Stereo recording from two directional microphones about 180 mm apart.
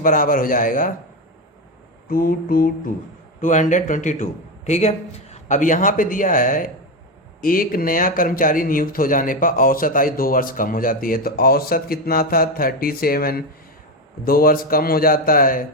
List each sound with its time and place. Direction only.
0.0 s a man's voice: 50° left (ahead or behind)
2.0 s a man's voice: 50° left (ahead or behind)